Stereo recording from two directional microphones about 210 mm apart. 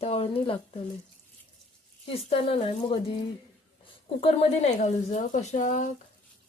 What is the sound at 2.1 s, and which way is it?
Speech, 25° left (ahead or behind).